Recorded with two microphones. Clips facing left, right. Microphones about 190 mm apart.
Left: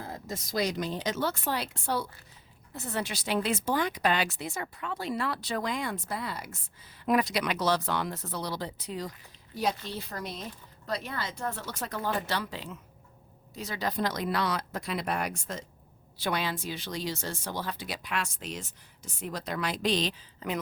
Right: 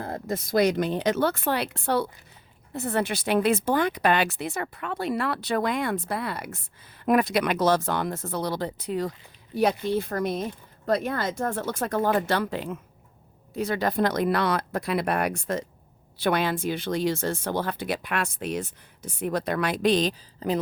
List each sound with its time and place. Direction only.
0.0 s speech: 55° right (ahead or behind)
20.4 s speech: 35° right (ahead or behind)